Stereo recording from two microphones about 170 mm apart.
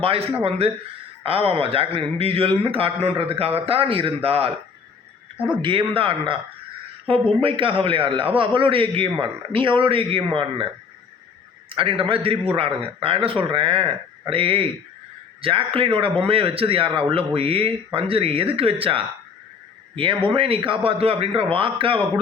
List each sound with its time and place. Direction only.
0.0 s a man's voice: 35° right (ahead or behind)
5.6 s a man's voice: 30° right (ahead or behind)
11.7 s a man's voice: 30° right (ahead or behind)